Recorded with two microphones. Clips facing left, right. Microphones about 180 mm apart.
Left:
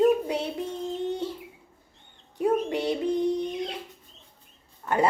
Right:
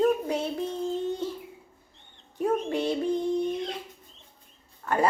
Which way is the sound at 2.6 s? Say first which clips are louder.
Even; 15° left (ahead or behind).